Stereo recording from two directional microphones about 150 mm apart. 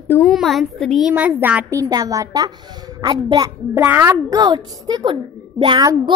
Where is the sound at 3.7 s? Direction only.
10° right (ahead or behind).